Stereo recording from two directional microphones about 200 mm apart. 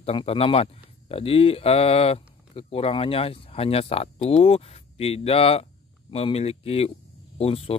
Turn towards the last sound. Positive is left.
turn(degrees=30)  # may be behind; listen again after turning